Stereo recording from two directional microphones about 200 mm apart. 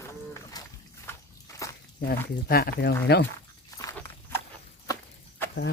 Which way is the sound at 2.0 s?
50° left (ahead or behind).